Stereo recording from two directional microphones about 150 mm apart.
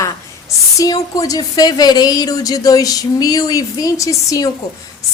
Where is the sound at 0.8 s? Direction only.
25° left (ahead or behind).